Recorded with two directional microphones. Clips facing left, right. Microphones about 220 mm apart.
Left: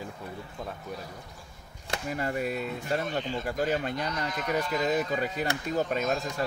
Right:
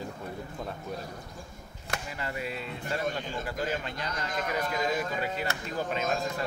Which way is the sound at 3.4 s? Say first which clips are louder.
Left 5 dB; 45° left (ahead or behind).